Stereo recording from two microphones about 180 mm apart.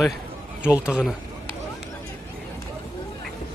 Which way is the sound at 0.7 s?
5° right (ahead or behind).